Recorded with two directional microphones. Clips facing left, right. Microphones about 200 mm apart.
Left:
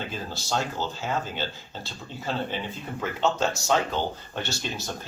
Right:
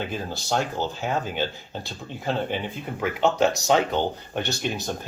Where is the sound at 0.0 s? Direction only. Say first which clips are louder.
Right 4 dB; 15° right (ahead or behind).